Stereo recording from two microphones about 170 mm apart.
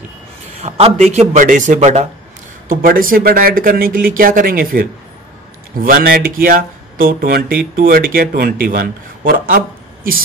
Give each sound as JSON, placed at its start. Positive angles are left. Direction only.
{"t": 0.6, "sound": "a man's voice", "side_deg": -35}
{"t": 2.7, "sound": "speech", "side_deg": -55}
{"t": 5.9, "sound": "speech", "side_deg": -60}